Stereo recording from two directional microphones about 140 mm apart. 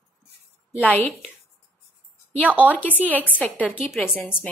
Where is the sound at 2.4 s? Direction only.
10° right (ahead or behind).